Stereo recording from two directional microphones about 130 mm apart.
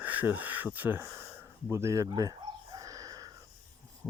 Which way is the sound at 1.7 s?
25° right (ahead or behind).